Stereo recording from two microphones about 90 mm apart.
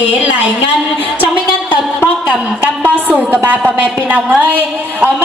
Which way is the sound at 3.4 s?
15° right (ahead or behind).